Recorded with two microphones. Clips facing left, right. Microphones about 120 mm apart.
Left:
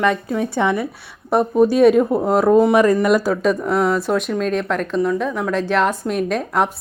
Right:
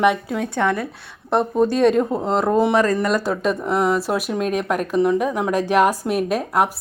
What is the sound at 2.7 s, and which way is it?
A woman's voice, 15° left (ahead or behind).